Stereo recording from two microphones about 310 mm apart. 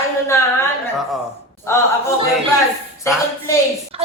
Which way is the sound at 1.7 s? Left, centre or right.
Centre.